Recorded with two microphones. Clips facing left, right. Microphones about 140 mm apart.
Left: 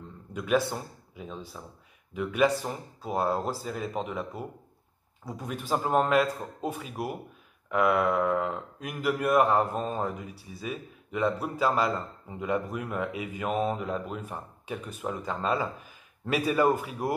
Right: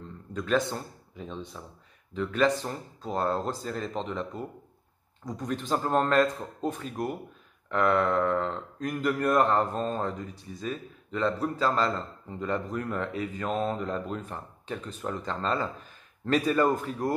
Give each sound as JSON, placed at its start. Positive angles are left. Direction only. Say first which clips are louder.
{"t": 0.3, "sound": "speech", "louder": "left 1 dB", "side_deg": 10}